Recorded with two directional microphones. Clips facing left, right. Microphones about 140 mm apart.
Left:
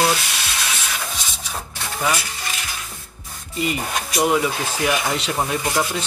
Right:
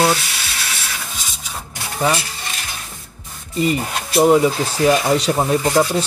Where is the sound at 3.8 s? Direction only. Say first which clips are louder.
Right 5 dB; 5° right (ahead or behind).